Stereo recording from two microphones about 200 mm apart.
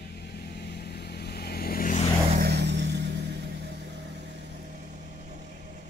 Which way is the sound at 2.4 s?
55° right (ahead or behind).